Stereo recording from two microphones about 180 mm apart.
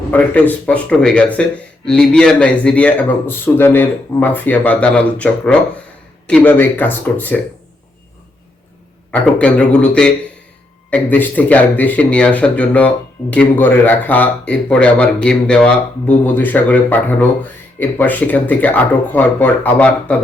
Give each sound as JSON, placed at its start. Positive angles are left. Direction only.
{"t": 0.1, "sound": "speech", "side_deg": 10}
{"t": 9.2, "sound": "speech", "side_deg": 5}